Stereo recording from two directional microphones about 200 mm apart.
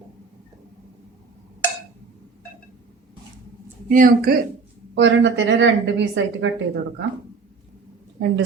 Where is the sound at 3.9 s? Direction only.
45° right (ahead or behind).